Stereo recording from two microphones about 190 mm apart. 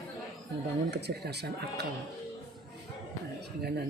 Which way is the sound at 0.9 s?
60° right (ahead or behind).